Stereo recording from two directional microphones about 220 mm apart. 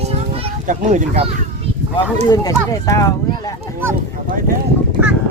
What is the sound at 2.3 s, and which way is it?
Speech, 15° left (ahead or behind).